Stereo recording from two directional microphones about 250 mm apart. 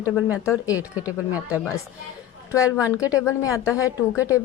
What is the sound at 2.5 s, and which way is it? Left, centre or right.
A woman's voice, centre.